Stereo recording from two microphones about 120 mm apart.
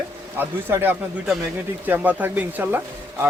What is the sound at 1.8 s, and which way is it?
Speech, 15° right (ahead or behind).